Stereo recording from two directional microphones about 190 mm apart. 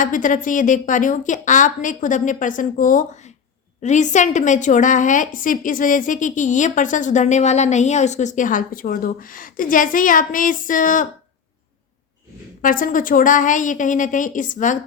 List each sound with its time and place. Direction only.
0.0 s a woman's voice: 45° left (ahead or behind)
12.6 s a woman's voice: 45° left (ahead or behind)